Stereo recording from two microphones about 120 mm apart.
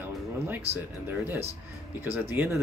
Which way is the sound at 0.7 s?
20° right (ahead or behind).